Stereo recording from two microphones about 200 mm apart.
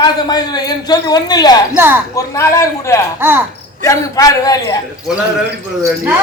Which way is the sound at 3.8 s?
15° left (ahead or behind).